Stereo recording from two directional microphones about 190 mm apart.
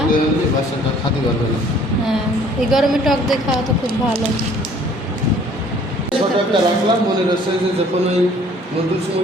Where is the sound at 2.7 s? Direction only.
Centre (ahead or behind).